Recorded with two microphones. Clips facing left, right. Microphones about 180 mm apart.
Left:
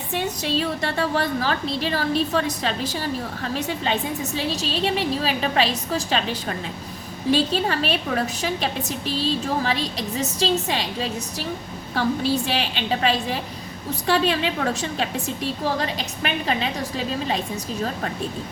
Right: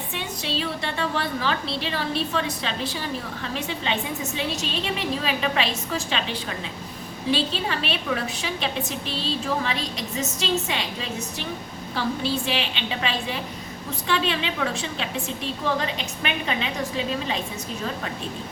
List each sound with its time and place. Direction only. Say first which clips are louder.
0.1 s a woman's voice: left 8 dB; 45° left (ahead or behind)
7.3 s a woman's voice: left 4 dB; 45° left (ahead or behind)